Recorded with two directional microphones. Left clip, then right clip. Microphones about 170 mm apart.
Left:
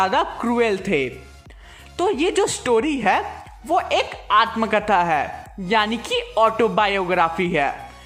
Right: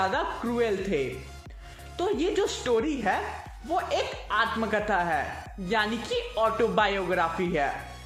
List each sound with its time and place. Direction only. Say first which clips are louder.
0.0 s a woman's voice: left 8 dB; 30° left (ahead or behind)